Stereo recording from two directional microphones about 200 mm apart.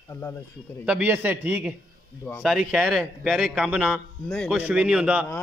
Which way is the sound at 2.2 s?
10° left (ahead or behind).